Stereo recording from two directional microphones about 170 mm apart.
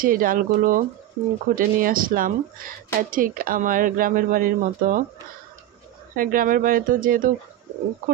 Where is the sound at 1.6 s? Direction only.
55° right (ahead or behind).